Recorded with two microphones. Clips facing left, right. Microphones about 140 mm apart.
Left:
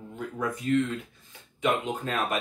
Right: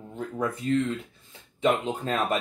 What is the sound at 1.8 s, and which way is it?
Speech, 30° right (ahead or behind).